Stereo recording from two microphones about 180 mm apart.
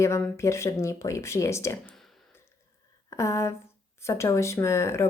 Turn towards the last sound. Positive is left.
turn(degrees=15)  # may be behind; listen again after turning